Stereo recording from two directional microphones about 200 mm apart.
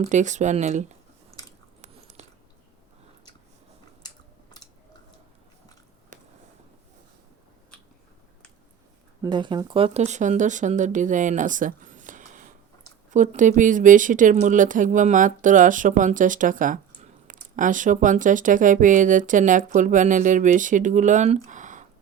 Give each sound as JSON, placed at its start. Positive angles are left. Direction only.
{"t": 0.0, "sound": "a woman's voice", "side_deg": -35}
{"t": 1.8, "sound": "biting", "side_deg": -35}
{"t": 9.2, "sound": "a woman's voice", "side_deg": -25}